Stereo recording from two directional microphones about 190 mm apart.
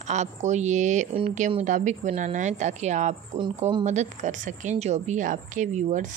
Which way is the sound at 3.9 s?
40° right (ahead or behind).